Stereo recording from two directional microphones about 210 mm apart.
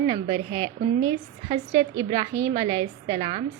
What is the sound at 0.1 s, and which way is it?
A woman's voice, 20° right (ahead or behind).